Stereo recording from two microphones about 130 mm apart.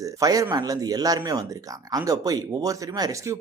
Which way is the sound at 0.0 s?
25° right (ahead or behind).